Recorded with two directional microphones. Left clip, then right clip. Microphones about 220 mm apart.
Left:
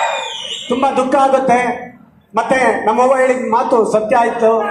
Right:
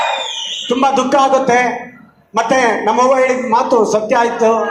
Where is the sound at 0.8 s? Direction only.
35° right (ahead or behind).